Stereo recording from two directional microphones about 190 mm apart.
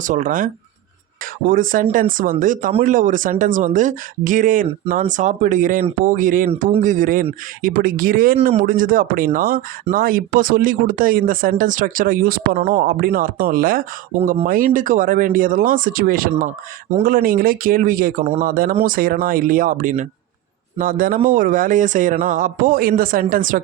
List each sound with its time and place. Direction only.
0.0 s speech: 45° right (ahead or behind)
6.5 s speech: 30° right (ahead or behind)